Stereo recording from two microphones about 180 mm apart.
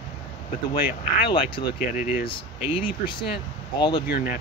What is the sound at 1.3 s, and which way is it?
Speech, 30° left (ahead or behind).